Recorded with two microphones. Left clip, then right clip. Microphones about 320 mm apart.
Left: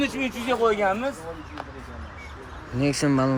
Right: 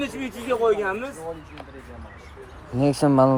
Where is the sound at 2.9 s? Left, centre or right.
Centre.